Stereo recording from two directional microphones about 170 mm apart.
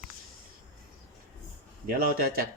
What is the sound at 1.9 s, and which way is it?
Speech, 60° right (ahead or behind).